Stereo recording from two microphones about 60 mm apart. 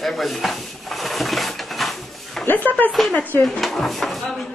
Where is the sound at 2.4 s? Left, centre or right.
Left.